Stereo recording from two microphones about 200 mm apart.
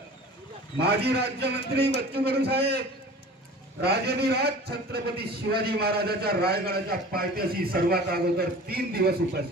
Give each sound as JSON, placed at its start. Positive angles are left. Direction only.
{"t": 0.8, "sound": "a man's voice", "side_deg": -55}
{"t": 3.8, "sound": "a man's voice", "side_deg": -50}